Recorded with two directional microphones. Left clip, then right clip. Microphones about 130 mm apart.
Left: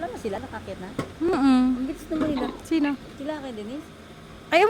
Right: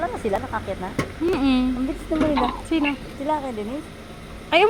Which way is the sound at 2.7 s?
60° left (ahead or behind).